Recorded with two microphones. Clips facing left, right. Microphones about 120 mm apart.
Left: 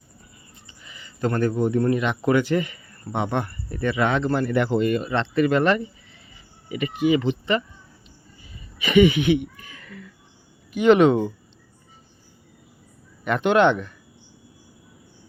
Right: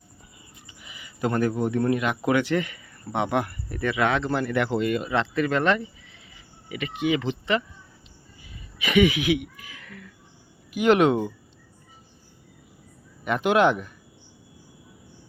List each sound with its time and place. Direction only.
0.7 s speech: 10° right (ahead or behind)
8.8 s speech: centre (ahead or behind)
13.2 s speech: 5° right (ahead or behind)